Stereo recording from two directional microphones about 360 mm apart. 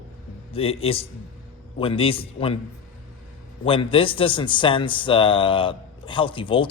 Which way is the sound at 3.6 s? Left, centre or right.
Centre.